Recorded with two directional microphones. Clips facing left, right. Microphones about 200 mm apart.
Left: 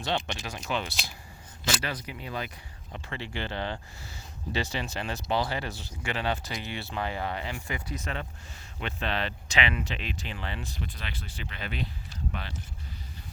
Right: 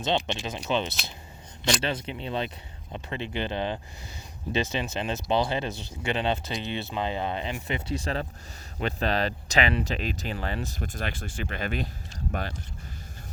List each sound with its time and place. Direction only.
0.0 s speech: 20° right (ahead or behind); by 12.5 s 45° right (ahead or behind)